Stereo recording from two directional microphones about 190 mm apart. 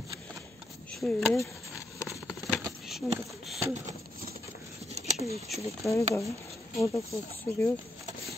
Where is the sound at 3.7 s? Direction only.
40° right (ahead or behind).